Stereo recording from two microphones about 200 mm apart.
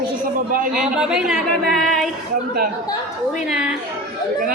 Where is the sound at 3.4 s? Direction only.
5° right (ahead or behind).